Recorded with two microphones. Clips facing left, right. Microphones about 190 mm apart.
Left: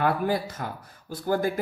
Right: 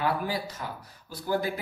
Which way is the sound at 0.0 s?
50° left (ahead or behind).